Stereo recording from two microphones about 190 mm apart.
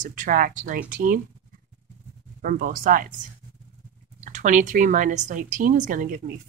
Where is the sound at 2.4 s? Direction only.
45° right (ahead or behind).